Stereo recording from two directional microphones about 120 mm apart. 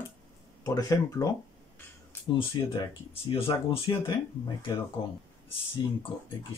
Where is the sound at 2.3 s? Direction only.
45° left (ahead or behind).